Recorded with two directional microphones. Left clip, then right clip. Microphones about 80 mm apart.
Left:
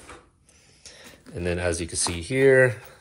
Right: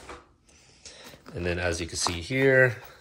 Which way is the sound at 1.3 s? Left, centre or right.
Right.